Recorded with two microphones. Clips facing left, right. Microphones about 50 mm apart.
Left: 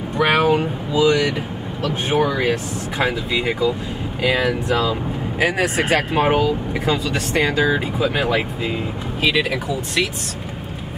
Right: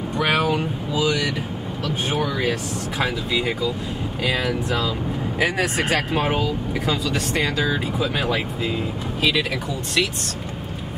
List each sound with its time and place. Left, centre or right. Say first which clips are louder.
0.2 s vehicle: left 5 dB; centre
2.2 s speech: left 4 dB; left
2.5 s speech: left 2 dB; centre
7.4 s speech: left 4 dB; centre